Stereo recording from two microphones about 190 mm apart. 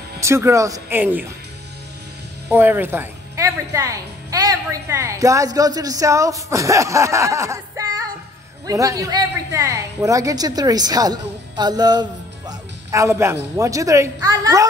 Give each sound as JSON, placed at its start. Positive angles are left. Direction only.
{"t": 0.2, "sound": "a woman's voice", "side_deg": -15}
{"t": 2.5, "sound": "a woman's voice", "side_deg": -10}